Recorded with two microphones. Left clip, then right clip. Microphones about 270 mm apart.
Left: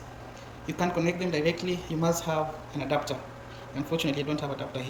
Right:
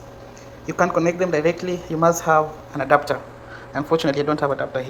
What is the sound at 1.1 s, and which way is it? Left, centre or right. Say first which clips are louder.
Speech: right 8 dB; centre.